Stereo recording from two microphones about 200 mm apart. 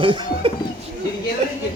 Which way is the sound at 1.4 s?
35° right (ahead or behind).